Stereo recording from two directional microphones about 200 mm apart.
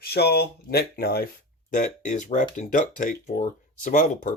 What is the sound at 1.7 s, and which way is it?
Speech, 40° left (ahead or behind).